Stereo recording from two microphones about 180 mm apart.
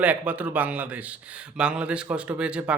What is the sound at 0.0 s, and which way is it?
Speech, 10° right (ahead or behind).